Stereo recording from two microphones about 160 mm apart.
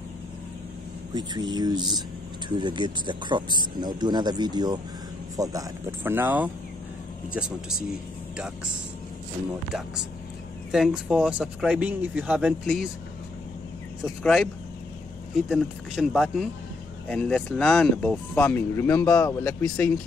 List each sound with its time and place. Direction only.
1.1 s speech: 25° right (ahead or behind)
10.7 s speech: 5° right (ahead or behind)
14.0 s speech: centre (ahead or behind)